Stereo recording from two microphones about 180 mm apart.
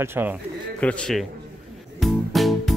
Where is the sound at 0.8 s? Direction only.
5° left (ahead or behind).